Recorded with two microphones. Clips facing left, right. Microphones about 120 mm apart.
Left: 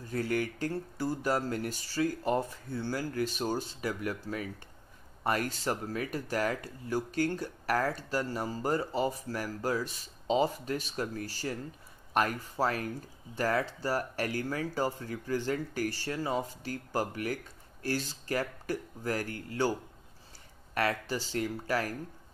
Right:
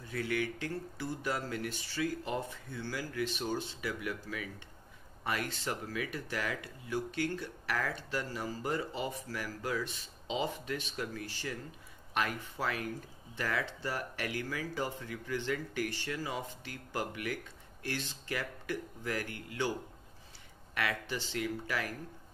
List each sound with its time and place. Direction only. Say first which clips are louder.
0.0 s speech: left 3 dB; 40° left (ahead or behind)
20.7 s speech: left 5 dB; 40° left (ahead or behind)